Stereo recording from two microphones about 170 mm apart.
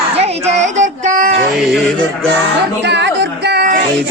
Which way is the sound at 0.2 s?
40° right (ahead or behind).